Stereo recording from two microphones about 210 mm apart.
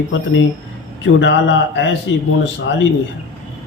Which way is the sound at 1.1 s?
60° left (ahead or behind).